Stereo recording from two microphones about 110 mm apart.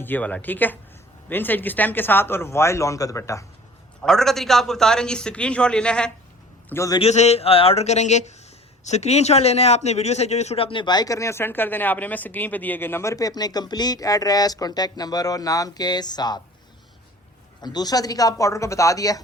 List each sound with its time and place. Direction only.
0.0 s a man's voice: 15° left (ahead or behind)
4.0 s a man's voice: 5° left (ahead or behind)
6.7 s a man's voice: 25° left (ahead or behind)
7.0 s a man's voice: 80° left; by 16.4 s 40° left (ahead or behind)
17.6 s a man's voice: 40° left (ahead or behind)